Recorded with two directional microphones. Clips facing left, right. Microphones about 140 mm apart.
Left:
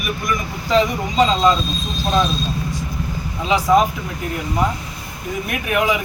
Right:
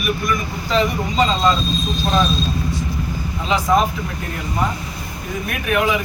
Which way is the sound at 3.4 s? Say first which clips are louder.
Left 2 dB; 10° left (ahead or behind).